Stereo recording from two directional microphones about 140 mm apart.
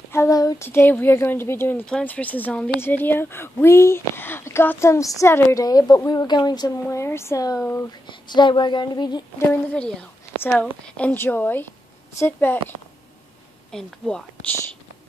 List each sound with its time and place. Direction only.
0.1 s a sound: 20° left (ahead or behind)
0.7 s speech: 15° left (ahead or behind)
7.9 s speech: 30° left (ahead or behind)
9.5 s speech: 5° left (ahead or behind)
13.7 s speech: 5° left (ahead or behind)